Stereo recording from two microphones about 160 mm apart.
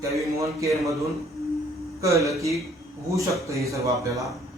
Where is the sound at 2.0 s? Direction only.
20° right (ahead or behind).